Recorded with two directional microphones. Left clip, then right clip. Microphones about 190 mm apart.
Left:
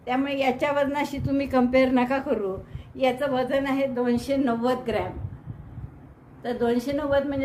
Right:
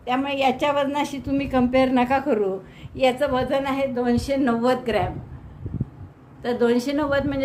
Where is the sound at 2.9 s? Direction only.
20° right (ahead or behind).